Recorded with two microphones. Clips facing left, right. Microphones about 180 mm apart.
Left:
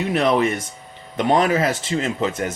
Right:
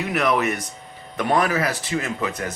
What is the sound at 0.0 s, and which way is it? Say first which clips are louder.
Speech: left 3 dB; 25° left (ahead or behind).